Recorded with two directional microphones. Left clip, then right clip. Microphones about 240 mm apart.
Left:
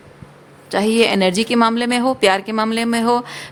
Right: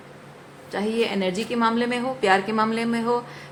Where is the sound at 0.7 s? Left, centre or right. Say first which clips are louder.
Left 9 dB; left.